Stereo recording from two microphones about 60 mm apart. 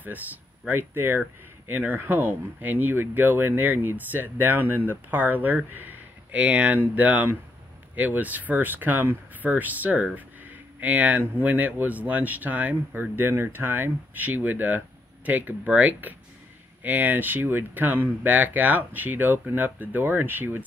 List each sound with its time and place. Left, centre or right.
0.7 s speech: right
10.1 s a sound: right
11.4 s speech: right